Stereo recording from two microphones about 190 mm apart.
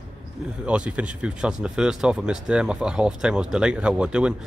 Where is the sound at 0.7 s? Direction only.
5° right (ahead or behind).